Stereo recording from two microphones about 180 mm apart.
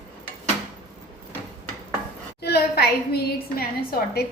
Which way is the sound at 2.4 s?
65° left (ahead or behind).